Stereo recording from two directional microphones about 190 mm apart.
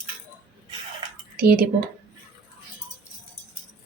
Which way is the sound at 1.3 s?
50° right (ahead or behind).